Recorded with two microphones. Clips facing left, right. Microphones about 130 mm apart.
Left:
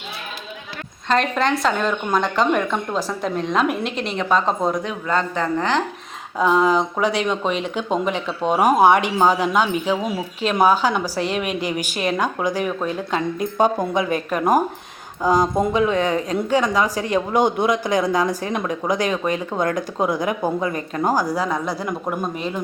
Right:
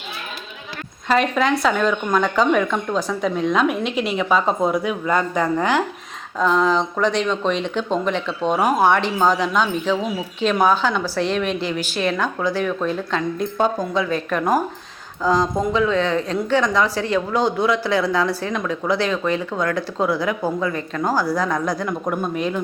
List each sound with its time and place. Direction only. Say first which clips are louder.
1.0 s speech: right 1 dB; 5° right (ahead or behind)
6.4 s speech: left 1 dB; 10° left (ahead or behind); by 21.0 s 25° left (ahead or behind)
21.0 s speech: even; 15° left (ahead or behind)
22.4 s speech: right 3 dB; centre (ahead or behind)